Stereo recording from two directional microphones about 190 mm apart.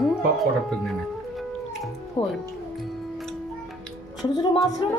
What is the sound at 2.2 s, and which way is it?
Speech, 25° left (ahead or behind).